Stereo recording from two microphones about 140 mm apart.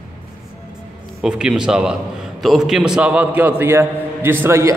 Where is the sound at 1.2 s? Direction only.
5° right (ahead or behind).